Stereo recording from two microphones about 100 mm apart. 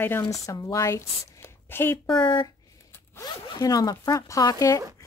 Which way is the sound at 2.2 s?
55° left (ahead or behind).